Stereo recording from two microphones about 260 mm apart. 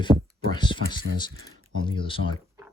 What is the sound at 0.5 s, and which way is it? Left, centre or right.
Speech, centre.